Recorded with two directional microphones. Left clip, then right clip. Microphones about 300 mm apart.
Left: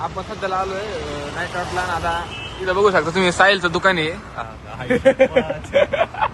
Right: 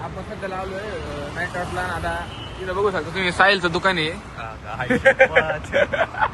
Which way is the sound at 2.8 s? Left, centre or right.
Left.